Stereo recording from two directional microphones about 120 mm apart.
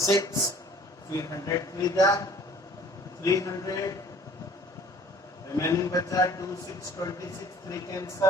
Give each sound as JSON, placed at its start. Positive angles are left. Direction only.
{"t": 0.0, "sound": "a man's voice", "side_deg": 25}
{"t": 5.5, "sound": "a man's voice", "side_deg": 25}